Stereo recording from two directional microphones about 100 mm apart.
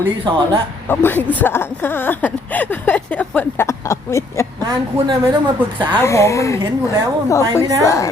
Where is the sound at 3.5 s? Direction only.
30° left (ahead or behind).